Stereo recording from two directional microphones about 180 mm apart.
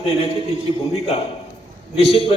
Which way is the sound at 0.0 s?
30° left (ahead or behind).